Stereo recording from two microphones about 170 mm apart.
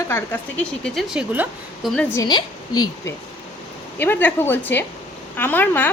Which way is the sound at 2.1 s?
25° left (ahead or behind).